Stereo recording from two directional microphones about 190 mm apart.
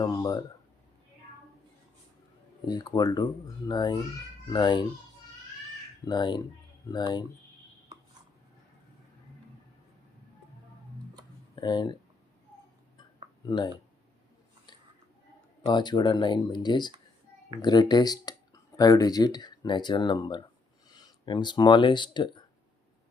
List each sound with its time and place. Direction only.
0.0 s speech: 20° left (ahead or behind)
2.6 s speech: 20° left (ahead or behind)
6.1 s speech: 25° left (ahead or behind)
11.5 s speech: 25° left (ahead or behind)
13.4 s speech: 20° left (ahead or behind)
15.6 s speech: 25° left (ahead or behind)